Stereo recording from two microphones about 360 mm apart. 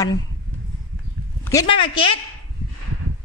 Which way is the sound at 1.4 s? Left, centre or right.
Centre.